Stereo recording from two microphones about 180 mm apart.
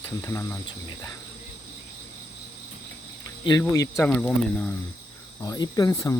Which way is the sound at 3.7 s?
20° left (ahead or behind).